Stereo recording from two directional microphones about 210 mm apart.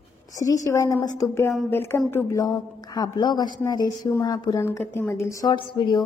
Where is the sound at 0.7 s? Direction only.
20° left (ahead or behind).